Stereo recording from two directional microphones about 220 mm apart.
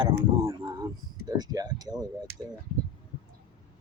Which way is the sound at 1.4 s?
15° right (ahead or behind).